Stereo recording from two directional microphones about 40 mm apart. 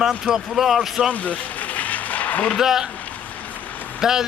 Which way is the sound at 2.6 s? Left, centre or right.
Centre.